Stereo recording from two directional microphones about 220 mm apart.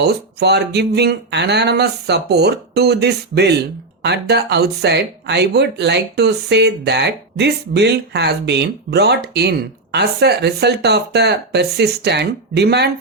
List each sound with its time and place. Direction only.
0.0 s speech: 50° right (ahead or behind)